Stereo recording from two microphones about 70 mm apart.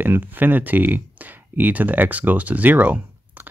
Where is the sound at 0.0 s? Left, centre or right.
Right.